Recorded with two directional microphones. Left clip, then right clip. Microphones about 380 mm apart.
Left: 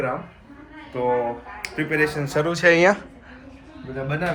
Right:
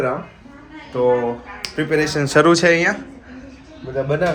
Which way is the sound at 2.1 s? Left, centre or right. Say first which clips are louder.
Right 9 dB; right.